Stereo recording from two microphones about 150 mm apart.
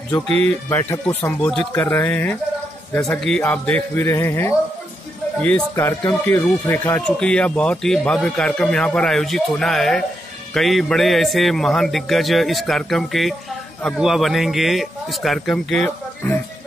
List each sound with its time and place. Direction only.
0.3 s speech: 45° right (ahead or behind)
0.7 s speech: 15° left (ahead or behind)
1.4 s a man's voice: 5° left (ahead or behind)